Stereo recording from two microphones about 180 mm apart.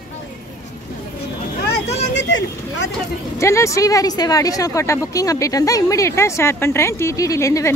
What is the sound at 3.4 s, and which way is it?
Speech, 15° left (ahead or behind).